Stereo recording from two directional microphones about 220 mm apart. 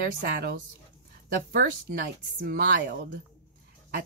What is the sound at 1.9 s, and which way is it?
Speech, 45° right (ahead or behind).